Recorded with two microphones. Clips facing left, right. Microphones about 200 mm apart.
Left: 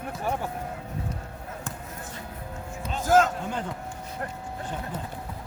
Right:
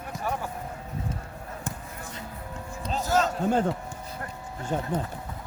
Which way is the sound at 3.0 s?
50° left (ahead or behind).